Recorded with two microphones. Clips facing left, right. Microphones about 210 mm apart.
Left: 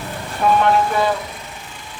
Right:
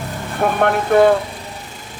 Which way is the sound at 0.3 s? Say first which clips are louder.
Left 1 dB; 55° right (ahead or behind).